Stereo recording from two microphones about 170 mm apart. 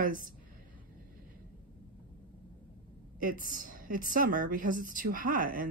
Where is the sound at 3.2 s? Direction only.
55° right (ahead or behind).